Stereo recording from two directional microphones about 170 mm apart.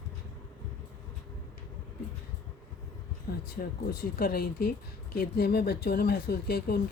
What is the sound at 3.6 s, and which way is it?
Speech, 60° left (ahead or behind).